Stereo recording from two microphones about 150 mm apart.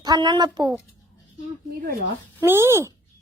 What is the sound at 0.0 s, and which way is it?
Speech, 30° right (ahead or behind).